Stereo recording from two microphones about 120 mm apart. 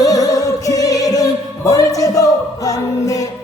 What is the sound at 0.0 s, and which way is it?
Music, 30° left (ahead or behind).